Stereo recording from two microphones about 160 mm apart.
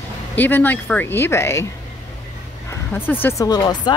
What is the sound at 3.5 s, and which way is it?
Speech, 25° left (ahead or behind).